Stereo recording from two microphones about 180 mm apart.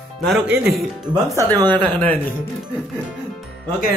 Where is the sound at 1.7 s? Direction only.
10° left (ahead or behind).